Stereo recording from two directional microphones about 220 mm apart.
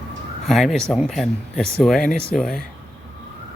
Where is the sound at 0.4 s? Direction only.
Centre (ahead or behind).